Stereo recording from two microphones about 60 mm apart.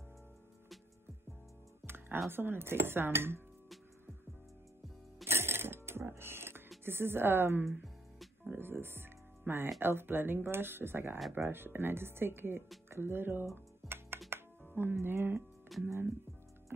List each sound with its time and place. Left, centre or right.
1.8 s music: centre
2.2 s speech: right
5.2 s music: right
6.8 s speech: right
13.8 s music: right
14.8 s speech: right
15.7 s speech: centre